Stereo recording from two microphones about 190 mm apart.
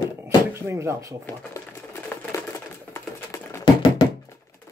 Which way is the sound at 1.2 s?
15° left (ahead or behind).